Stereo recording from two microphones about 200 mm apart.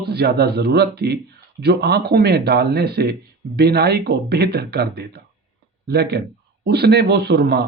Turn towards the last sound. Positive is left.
turn(degrees=-55)  # may be behind; listen again after turning